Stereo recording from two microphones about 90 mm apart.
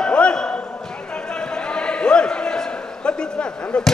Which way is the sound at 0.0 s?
10° left (ahead or behind).